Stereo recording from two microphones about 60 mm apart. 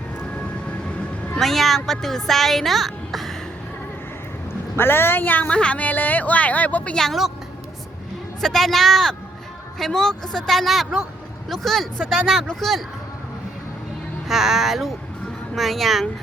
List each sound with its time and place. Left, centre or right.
1.4 s a child's voice: centre
4.8 s speech: left
5.5 s speech: centre
6.9 s speech: centre
8.4 s a child's voice: centre
14.3 s a child's voice: centre